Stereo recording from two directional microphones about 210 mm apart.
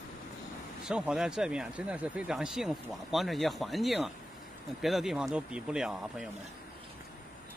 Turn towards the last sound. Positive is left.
turn(degrees=-5)  # may be behind; listen again after turning